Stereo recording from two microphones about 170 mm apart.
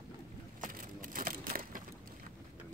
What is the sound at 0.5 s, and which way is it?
Crushing, 55° right (ahead or behind).